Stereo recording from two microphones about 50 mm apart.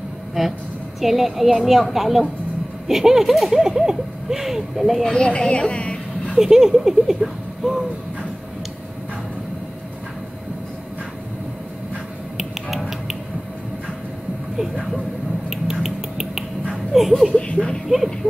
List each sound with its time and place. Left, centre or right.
0.4 s a woman's voice: centre
5.1 s a woman's voice: centre
6.3 s speech: centre
12.4 s a sound: centre
15.5 s finger snapping: centre
16.9 s speech: centre
17.4 s a sound: centre
17.8 s a woman's voice: centre